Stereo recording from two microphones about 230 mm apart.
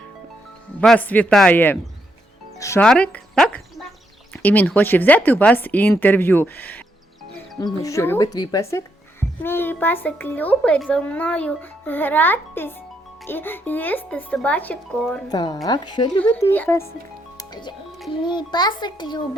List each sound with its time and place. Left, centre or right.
0.8 s speech: centre
15.3 s speech: centre
17.3 s music: centre
18.3 s a child's voice: centre